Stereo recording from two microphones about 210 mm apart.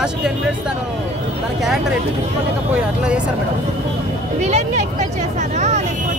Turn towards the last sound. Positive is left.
turn(degrees=-35)  # may be behind; listen again after turning